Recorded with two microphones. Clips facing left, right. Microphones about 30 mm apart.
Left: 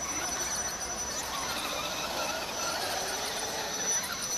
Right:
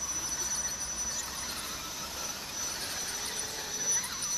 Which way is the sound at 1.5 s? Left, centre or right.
Left.